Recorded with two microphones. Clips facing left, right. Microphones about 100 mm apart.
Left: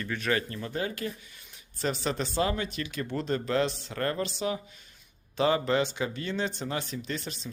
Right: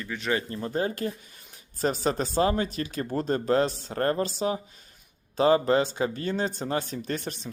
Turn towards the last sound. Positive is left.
turn(degrees=-50)  # may be behind; listen again after turning